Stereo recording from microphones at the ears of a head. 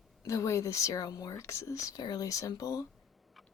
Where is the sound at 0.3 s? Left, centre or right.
Left.